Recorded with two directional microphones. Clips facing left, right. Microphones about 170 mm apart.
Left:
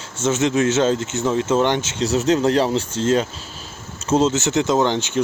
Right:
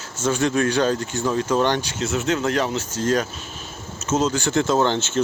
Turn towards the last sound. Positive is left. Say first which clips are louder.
# left 1 dB
turn(degrees=15)  # may be behind; listen again after turning